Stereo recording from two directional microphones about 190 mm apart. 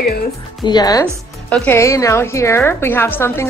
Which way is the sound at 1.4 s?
10° left (ahead or behind).